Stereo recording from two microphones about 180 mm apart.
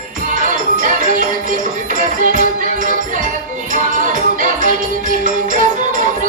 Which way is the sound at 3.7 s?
45° right (ahead or behind).